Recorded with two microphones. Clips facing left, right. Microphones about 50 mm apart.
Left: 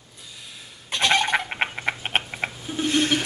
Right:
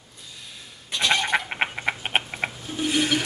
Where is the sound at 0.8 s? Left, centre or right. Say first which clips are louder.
Left 2 dB; left.